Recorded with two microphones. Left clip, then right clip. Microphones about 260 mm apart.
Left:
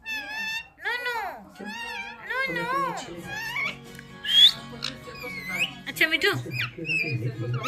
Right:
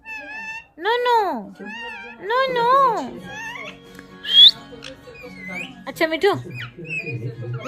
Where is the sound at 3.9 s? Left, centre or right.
Right.